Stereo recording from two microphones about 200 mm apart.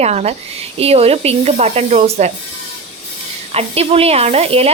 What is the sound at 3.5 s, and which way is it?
A woman's voice, 30° right (ahead or behind).